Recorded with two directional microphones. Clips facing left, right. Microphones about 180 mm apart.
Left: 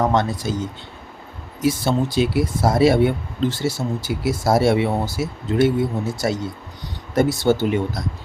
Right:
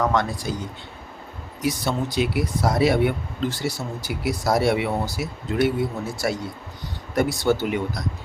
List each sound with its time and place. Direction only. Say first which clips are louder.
0.0 s speech: left 3 dB; 25° left (ahead or behind)
1.6 s speech: left 5 dB; 30° left (ahead or behind)